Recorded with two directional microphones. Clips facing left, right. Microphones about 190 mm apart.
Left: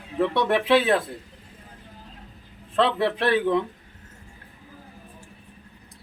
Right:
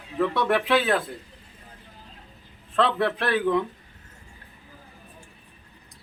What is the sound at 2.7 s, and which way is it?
Speech, 25° left (ahead or behind).